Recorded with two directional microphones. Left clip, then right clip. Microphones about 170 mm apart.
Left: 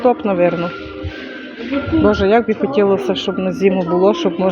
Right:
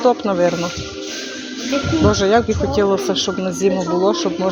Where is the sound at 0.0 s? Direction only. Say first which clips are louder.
Left 1 dB; 10° left (ahead or behind).